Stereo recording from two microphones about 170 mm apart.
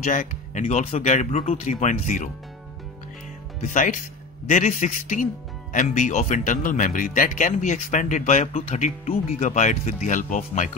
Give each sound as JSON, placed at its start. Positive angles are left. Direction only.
{"t": 0.0, "sound": "speech", "side_deg": 50}
{"t": 3.6, "sound": "speech", "side_deg": 50}